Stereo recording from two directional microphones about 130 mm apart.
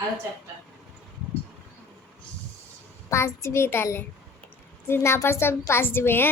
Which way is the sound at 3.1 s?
20° left (ahead or behind).